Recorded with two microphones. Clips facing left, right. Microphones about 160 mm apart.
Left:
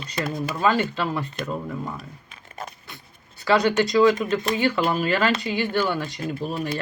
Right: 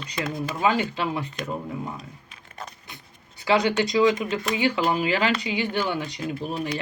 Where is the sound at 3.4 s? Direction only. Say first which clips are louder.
Left 2 dB; 15° right (ahead or behind).